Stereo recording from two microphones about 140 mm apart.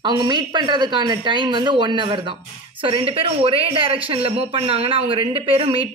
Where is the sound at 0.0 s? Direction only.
30° right (ahead or behind).